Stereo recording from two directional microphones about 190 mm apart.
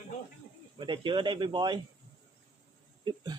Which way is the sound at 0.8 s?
25° right (ahead or behind).